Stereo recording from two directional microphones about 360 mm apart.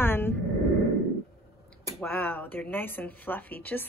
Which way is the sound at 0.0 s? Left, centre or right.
Centre.